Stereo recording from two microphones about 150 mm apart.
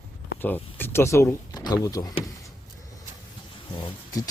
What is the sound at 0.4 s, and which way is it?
Speech, 15° left (ahead or behind).